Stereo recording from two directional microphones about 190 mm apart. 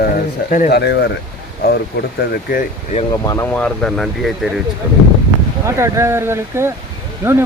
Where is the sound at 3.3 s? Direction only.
10° left (ahead or behind).